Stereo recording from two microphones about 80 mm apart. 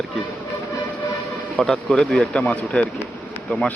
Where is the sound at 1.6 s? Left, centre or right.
Centre.